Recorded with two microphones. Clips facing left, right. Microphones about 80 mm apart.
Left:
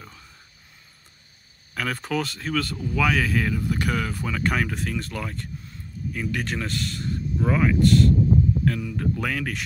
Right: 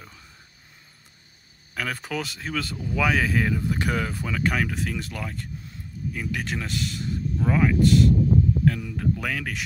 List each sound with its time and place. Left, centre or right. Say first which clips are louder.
1.7 s speech: left 2 dB; centre
3.3 s speech: even; centre
4.1 s speech: even; centre